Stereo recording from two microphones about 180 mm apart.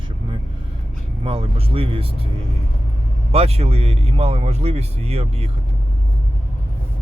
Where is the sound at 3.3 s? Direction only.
35° right (ahead or behind).